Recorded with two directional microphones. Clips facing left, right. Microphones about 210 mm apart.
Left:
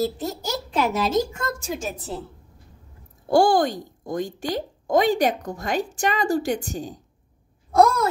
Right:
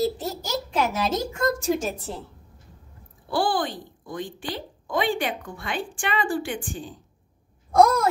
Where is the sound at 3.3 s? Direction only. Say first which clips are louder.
Left 7 dB; 45° left (ahead or behind).